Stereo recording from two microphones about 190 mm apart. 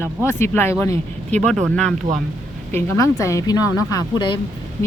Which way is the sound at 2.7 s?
15° left (ahead or behind).